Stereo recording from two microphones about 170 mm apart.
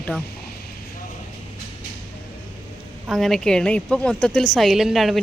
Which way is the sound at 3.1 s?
Centre (ahead or behind).